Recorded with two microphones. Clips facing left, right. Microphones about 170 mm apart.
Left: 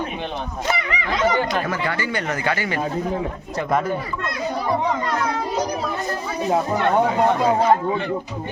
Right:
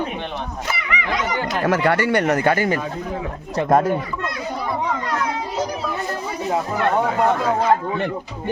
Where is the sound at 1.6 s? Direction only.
75° right (ahead or behind); by 2.7 s 45° right (ahead or behind).